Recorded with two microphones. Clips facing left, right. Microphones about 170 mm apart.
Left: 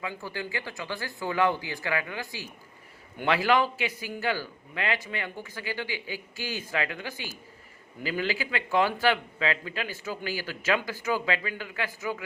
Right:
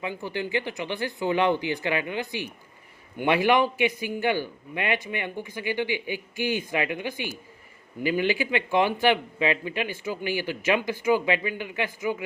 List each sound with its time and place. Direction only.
0.0 s a man's voice: 20° right (ahead or behind)